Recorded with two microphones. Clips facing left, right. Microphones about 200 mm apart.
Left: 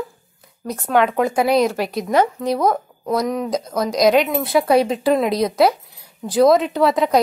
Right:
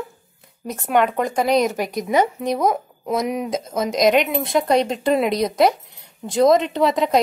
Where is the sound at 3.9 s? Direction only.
Centre (ahead or behind).